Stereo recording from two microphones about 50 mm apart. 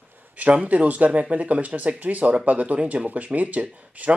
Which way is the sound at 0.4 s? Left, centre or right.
Right.